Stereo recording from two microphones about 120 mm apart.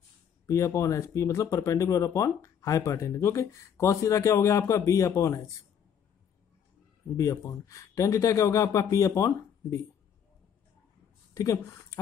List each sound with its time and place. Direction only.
0.5 s speech: 25° left (ahead or behind)
7.2 s speech: 30° left (ahead or behind)
11.3 s speech: 25° left (ahead or behind)